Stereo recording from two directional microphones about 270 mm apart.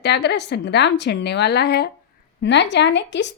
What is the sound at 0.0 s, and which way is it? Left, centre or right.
A woman's voice, left.